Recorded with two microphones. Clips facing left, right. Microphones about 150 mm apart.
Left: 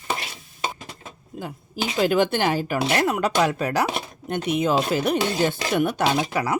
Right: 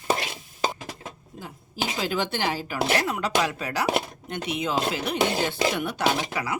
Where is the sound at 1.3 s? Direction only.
60° left (ahead or behind).